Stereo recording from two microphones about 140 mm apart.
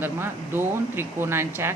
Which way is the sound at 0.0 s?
15° right (ahead or behind).